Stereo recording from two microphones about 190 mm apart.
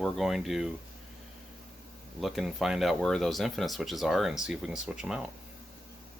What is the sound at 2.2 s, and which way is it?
Speech, centre (ahead or behind).